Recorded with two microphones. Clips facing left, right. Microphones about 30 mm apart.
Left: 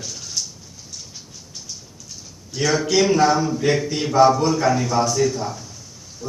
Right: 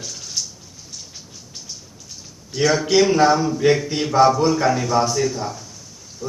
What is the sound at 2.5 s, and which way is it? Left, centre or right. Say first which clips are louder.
A man's voice: right 2 dB; centre.